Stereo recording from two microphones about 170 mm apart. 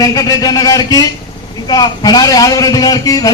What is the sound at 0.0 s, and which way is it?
A man's voice, 20° left (ahead or behind).